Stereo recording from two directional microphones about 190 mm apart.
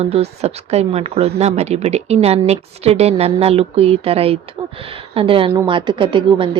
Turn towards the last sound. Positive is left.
turn(degrees=-25)  # may be behind; listen again after turning